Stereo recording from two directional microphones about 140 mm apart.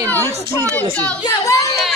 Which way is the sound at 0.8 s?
10° left (ahead or behind).